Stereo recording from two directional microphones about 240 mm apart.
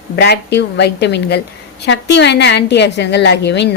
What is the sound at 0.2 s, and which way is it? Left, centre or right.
A woman's voice, left.